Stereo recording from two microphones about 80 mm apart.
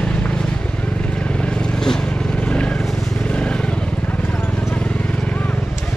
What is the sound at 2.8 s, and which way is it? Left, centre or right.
Vehicle, centre.